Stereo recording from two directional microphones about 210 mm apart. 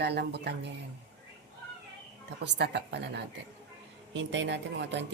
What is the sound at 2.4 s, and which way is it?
A woman's voice, 55° right (ahead or behind).